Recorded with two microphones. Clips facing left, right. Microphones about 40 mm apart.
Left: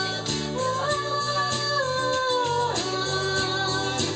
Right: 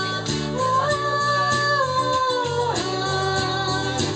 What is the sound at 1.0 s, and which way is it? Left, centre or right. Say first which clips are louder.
Music: right 5 dB; centre.